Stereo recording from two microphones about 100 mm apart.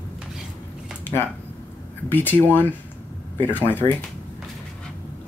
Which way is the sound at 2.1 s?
20° left (ahead or behind).